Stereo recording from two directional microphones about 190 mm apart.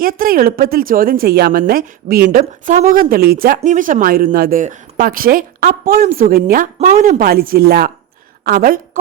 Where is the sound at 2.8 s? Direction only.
50° right (ahead or behind).